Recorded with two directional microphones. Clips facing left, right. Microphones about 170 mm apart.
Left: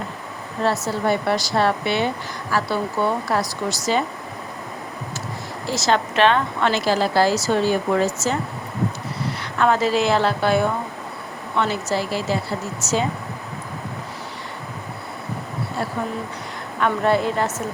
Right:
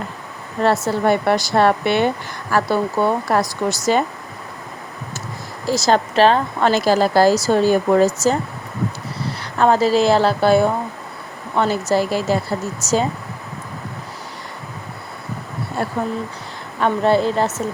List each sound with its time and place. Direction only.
0.6 s speech: 60° right (ahead or behind)
5.6 s speech: 40° right (ahead or behind)
9.4 s speech: 35° right (ahead or behind)
15.8 s speech: 55° right (ahead or behind)
16.8 s speech: 30° right (ahead or behind)